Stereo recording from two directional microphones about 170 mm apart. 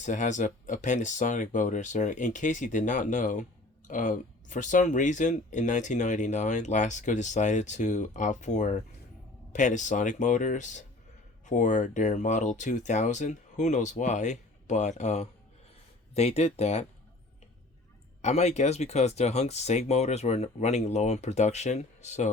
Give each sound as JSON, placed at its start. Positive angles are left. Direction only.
{"t": 0.0, "sound": "speech", "side_deg": 45}
{"t": 18.2, "sound": "speech", "side_deg": 40}